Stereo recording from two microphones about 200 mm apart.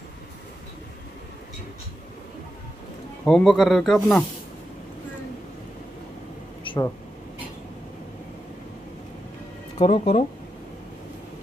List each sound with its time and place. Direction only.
3.3 s speech: 5° left (ahead or behind)
6.6 s a sound: 25° left (ahead or behind)
9.8 s speech: 30° left (ahead or behind)